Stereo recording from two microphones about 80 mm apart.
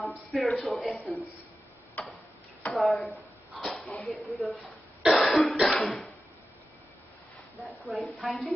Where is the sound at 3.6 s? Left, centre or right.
Centre.